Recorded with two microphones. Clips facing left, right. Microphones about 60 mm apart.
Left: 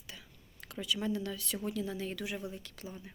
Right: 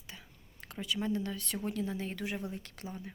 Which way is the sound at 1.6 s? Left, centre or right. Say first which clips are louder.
Right 1 dB; right.